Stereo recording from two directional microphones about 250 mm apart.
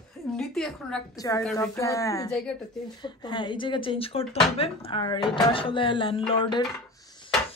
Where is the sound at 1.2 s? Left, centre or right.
Centre.